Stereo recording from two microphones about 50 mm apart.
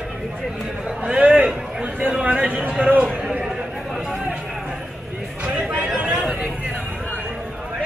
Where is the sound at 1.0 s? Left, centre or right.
Right.